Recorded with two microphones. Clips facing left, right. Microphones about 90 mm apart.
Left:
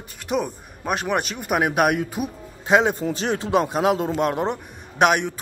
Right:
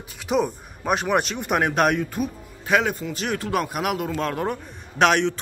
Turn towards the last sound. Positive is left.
turn(degrees=10)  # may be behind; listen again after turning